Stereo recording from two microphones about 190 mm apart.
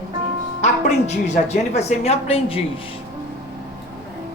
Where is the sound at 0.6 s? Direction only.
35° left (ahead or behind).